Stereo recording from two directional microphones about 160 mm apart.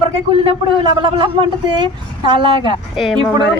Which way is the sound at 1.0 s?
30° right (ahead or behind).